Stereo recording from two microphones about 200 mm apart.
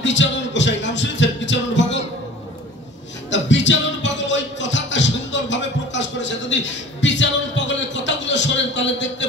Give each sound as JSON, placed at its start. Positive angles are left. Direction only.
{"t": 0.0, "sound": "music", "side_deg": 65}
{"t": 3.3, "sound": "music", "side_deg": 65}